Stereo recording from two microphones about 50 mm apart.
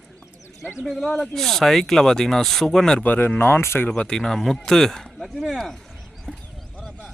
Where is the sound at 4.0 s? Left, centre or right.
Centre.